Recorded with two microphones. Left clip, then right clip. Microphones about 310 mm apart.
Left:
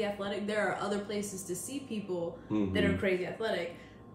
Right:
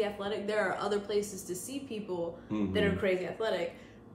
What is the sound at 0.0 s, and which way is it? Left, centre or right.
A man's voice, centre.